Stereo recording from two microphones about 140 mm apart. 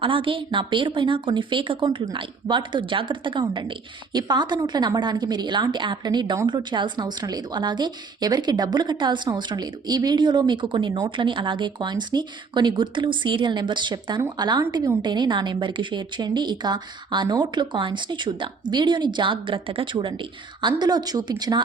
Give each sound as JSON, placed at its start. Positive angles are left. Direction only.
{"t": 0.0, "sound": "a woman's voice", "side_deg": -40}